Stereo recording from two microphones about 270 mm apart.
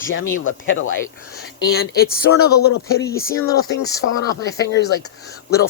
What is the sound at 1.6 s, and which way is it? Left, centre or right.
Speech, left.